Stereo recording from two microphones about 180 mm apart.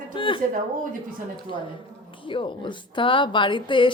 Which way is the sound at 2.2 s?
30° left (ahead or behind).